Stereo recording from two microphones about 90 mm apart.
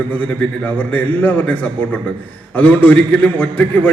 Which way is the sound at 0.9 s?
15° left (ahead or behind).